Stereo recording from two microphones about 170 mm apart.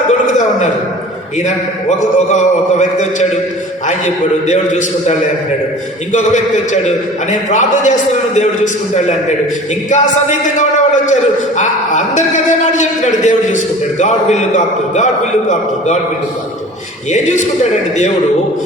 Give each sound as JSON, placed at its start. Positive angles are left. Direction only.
{"t": 1.5, "sound": "a man's voice", "side_deg": 45}
{"t": 17.1, "sound": "a man's voice", "side_deg": 45}